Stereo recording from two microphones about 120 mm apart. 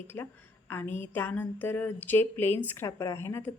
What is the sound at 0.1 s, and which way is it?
A woman's voice, 15° left (ahead or behind).